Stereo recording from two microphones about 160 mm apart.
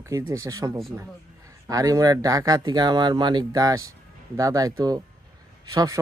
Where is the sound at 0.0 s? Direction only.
15° right (ahead or behind).